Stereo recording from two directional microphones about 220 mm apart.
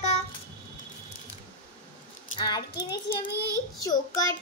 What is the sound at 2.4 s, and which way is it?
A child's voice, 20° left (ahead or behind).